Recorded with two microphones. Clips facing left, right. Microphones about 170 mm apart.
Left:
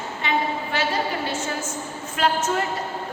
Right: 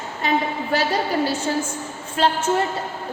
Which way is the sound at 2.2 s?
30° right (ahead or behind).